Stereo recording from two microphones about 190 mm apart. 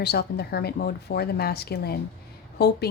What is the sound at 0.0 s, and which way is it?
Speech, 55° left (ahead or behind).